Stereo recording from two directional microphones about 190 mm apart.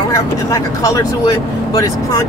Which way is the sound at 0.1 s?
20° left (ahead or behind).